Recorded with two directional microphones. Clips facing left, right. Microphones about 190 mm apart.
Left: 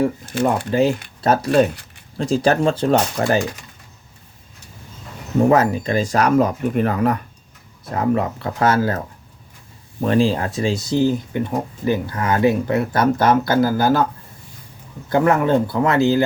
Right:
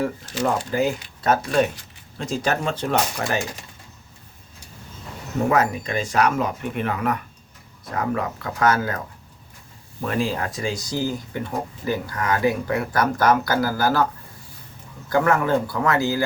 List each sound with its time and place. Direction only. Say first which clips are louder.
0.7 s speech: left 5 dB; 25° left (ahead or behind)
5.4 s speech: left 5 dB; 30° left (ahead or behind)
10.0 s speech: left 7 dB; 30° left (ahead or behind)
15.1 s speech: left 4 dB; 20° left (ahead or behind)